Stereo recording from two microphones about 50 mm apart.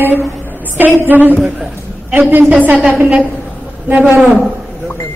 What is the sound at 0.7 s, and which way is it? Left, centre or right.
A woman's voice, right.